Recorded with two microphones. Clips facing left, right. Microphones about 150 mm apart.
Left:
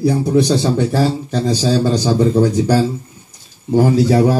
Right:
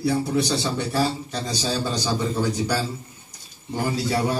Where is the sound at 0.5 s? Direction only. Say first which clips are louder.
Left 9 dB; 90° left.